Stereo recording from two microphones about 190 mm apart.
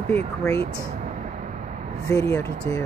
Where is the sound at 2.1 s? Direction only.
15° left (ahead or behind).